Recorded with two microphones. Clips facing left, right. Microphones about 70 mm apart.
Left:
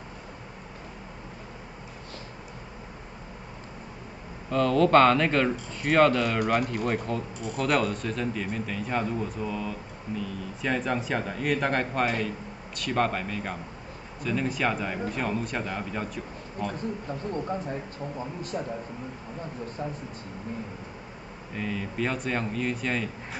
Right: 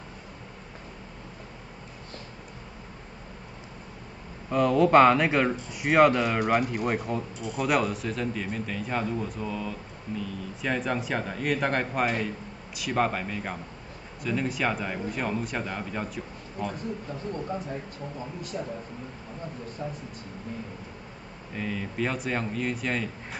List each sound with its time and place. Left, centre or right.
4.5 s speech: centre
18.5 s speech: left
19.8 s speech: left
21.5 s speech: centre